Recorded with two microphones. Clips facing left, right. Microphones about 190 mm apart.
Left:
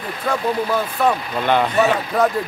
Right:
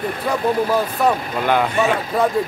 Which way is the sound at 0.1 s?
45° right (ahead or behind).